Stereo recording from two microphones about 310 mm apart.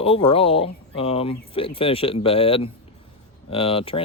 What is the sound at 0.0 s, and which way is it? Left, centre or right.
Speech, centre.